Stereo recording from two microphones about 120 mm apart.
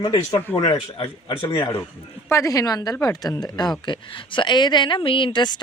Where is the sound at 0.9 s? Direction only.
50° left (ahead or behind).